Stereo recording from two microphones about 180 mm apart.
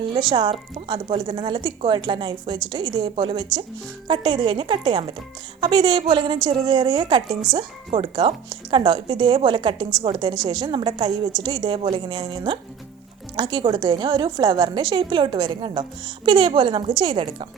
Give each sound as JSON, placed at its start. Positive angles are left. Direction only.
{"t": 0.1, "sound": "a woman's voice", "side_deg": -25}